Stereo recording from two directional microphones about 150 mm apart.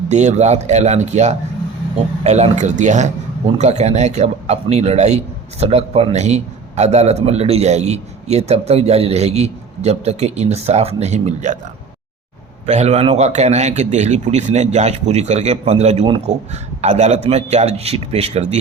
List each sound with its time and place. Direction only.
0.1 s speech: 50° right (ahead or behind)
12.6 s speech: 45° right (ahead or behind)